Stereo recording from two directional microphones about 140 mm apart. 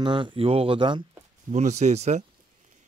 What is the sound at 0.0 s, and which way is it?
Speech, 35° right (ahead or behind).